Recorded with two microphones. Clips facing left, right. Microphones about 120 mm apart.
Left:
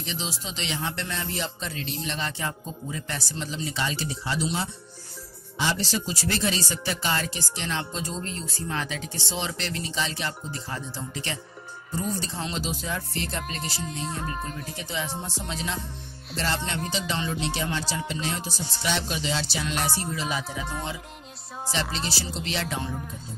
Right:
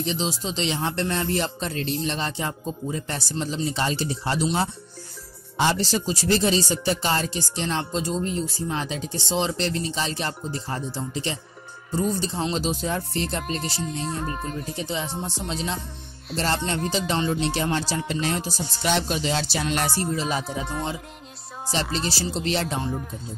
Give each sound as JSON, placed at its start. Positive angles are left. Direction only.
{"t": 0.0, "sound": "speech", "side_deg": -30}
{"t": 2.3, "sound": "speech", "side_deg": -20}
{"t": 3.1, "sound": "speech", "side_deg": -35}
{"t": 5.8, "sound": "speech", "side_deg": -35}
{"t": 8.8, "sound": "speech", "side_deg": -30}
{"t": 11.0, "sound": "speech", "side_deg": -25}
{"t": 13.8, "sound": "music", "side_deg": 0}
{"t": 14.8, "sound": "speech", "side_deg": -30}
{"t": 16.3, "sound": "speech", "side_deg": -40}
{"t": 21.9, "sound": "speech", "side_deg": -40}